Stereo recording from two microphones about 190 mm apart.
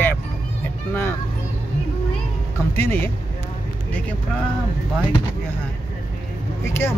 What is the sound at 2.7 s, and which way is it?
Speech, 10° left (ahead or behind).